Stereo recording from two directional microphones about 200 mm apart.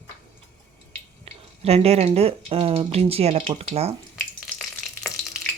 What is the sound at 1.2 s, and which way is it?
Speech, 30° right (ahead or behind).